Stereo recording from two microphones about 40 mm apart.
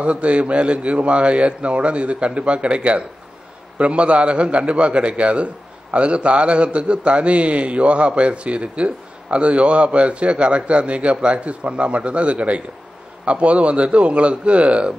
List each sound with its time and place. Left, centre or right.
0.0 s a man's voice: right